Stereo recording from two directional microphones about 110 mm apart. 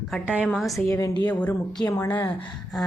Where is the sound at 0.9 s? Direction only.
30° left (ahead or behind).